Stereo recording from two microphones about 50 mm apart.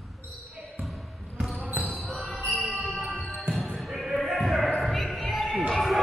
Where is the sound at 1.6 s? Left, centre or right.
Right.